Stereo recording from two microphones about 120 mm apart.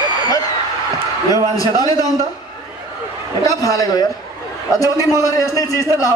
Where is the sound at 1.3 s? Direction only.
30° left (ahead or behind).